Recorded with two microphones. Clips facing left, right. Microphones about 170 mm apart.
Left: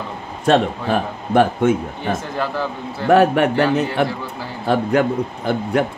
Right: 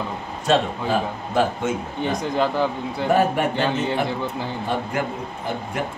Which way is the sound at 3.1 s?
70° left (ahead or behind).